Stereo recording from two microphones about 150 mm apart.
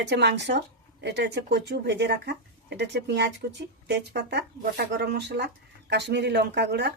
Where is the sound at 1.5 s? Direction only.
90° right.